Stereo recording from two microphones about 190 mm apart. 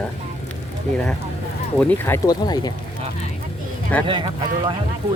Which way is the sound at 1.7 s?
10° left (ahead or behind).